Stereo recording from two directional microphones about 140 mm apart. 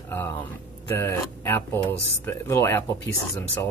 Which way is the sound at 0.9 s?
15° left (ahead or behind).